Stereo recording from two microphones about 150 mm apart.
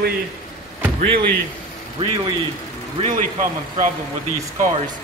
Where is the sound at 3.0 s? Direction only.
55° right (ahead or behind).